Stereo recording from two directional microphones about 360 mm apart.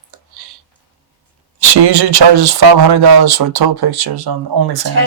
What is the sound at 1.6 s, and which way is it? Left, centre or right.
Speech, right.